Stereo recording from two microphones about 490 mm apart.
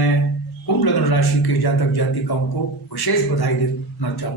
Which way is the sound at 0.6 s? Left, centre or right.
Left.